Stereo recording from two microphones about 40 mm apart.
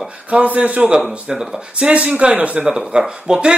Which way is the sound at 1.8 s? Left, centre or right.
Right.